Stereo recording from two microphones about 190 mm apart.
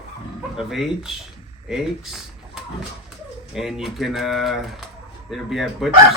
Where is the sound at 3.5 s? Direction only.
Centre (ahead or behind).